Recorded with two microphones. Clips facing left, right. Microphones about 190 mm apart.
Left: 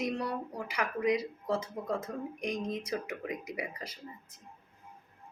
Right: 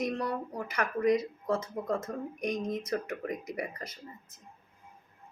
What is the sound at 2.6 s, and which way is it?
Speech, 50° right (ahead or behind).